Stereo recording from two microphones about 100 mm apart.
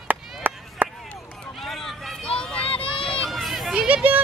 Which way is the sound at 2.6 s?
65° left (ahead or behind).